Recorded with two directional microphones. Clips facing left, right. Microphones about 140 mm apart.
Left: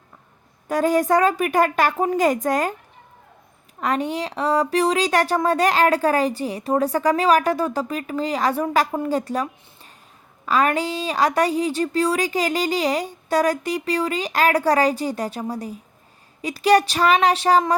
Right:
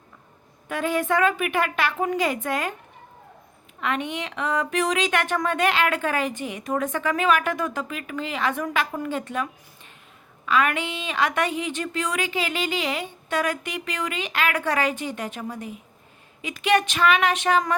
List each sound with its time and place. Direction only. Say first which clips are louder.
0.7 s a woman's voice: left 6 dB; 40° left (ahead or behind)
3.8 s a woman's voice: left 4 dB; 40° left (ahead or behind)